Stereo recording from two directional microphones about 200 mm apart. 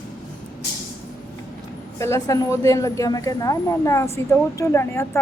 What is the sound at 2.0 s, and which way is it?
A woman's voice, 15° left (ahead or behind).